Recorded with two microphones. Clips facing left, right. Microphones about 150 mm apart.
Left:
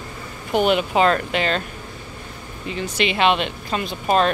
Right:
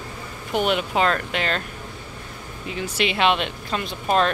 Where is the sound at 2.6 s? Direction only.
5° right (ahead or behind).